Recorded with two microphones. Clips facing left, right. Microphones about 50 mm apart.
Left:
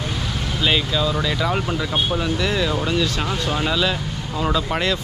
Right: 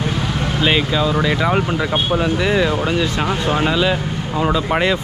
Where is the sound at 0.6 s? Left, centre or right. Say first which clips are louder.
Right 3 dB; right.